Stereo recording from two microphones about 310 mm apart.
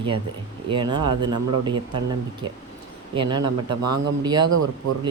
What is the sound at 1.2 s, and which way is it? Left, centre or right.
Speech, right.